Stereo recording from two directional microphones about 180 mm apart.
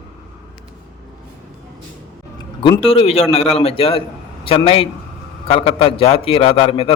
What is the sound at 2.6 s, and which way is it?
A man's voice, 30° left (ahead or behind).